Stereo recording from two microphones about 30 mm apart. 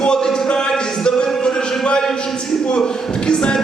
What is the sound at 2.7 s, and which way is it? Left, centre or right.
Speech, left.